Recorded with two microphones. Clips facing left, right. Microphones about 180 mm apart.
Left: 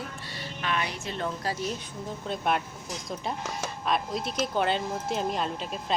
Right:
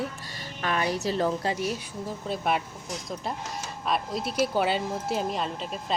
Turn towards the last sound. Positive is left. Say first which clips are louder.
# even
turn(degrees=0)  # may be behind; listen again after turning